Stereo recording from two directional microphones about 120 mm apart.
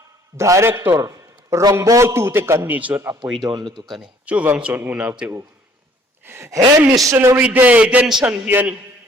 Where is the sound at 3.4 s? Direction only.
40° right (ahead or behind).